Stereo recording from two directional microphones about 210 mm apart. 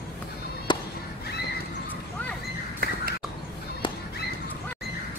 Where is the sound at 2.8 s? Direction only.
50° right (ahead or behind).